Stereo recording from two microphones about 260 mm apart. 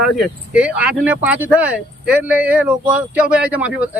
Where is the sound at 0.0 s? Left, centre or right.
Centre.